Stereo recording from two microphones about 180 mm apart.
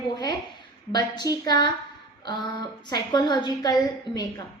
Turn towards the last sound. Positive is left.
turn(degrees=20)  # may be behind; listen again after turning